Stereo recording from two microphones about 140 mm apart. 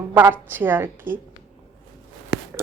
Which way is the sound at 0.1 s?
15° right (ahead or behind).